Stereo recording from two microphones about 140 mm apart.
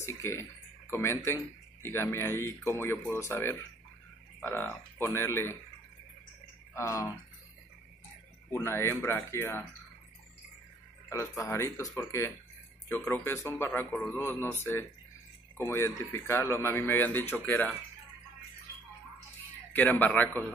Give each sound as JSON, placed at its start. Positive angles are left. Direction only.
{"t": 0.0, "sound": "speech", "side_deg": 20}
{"t": 6.7, "sound": "speech", "side_deg": 20}
{"t": 8.5, "sound": "speech", "side_deg": 15}
{"t": 11.1, "sound": "speech", "side_deg": 20}
{"t": 19.7, "sound": "speech", "side_deg": 15}